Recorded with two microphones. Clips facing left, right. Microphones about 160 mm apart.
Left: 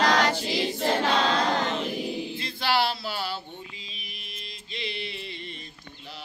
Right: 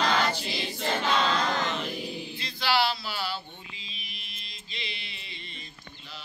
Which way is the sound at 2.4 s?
55° left (ahead or behind).